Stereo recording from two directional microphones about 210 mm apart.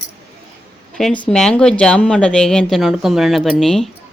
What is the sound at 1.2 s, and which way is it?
Speech, 5° left (ahead or behind).